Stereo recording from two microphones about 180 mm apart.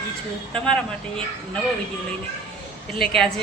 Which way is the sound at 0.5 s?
5° left (ahead or behind).